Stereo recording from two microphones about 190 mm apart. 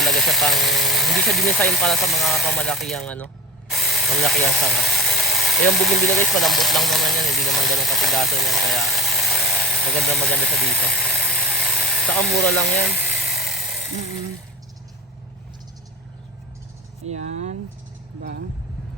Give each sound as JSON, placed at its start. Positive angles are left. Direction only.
{"t": 0.0, "sound": "speech", "side_deg": 0}
{"t": 3.7, "sound": "power tool", "side_deg": 0}
{"t": 6.2, "sound": "speech", "side_deg": 0}
{"t": 12.7, "sound": "speech", "side_deg": 55}
{"t": 13.1, "sound": "a sound", "side_deg": 0}
{"t": 17.1, "sound": "speech", "side_deg": -40}